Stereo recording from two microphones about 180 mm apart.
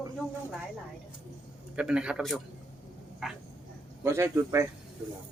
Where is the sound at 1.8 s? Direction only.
5° right (ahead or behind).